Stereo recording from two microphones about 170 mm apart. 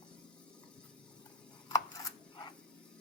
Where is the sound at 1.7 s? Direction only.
25° left (ahead or behind).